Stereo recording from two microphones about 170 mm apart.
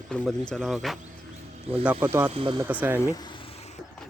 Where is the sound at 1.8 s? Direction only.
15° right (ahead or behind).